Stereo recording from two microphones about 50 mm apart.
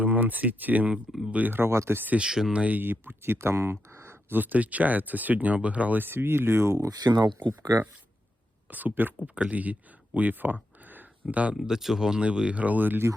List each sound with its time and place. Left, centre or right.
0.0 s a sound: right
0.6 s speech: right
1.5 s speech: right
2.1 s speech: centre
2.5 s speech: right
2.7 s speech: right
3.4 s speech: right
4.3 s speech: right
6.0 s speech: right
7.1 s speech: right
8.7 s speech: right
9.2 s speech: right
10.2 s a sound: right
11.6 s speech: centre; by 13.0 s right